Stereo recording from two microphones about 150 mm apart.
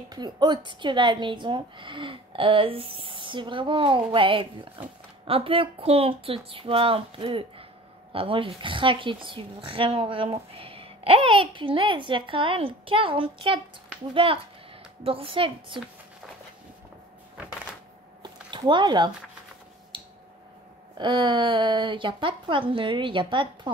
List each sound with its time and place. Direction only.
0.1 s a woman's voice: 30° right (ahead or behind)
18.2 s a sound: 30° right (ahead or behind)
21.0 s speech: 35° right (ahead or behind)